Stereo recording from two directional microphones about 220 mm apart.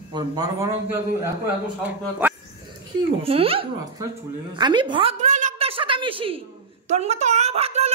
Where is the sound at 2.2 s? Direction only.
10° right (ahead or behind).